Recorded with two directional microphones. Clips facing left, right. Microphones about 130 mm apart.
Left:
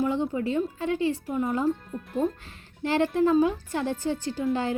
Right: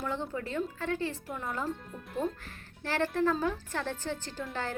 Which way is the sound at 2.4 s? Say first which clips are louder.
Left 9 dB; 20° left (ahead or behind).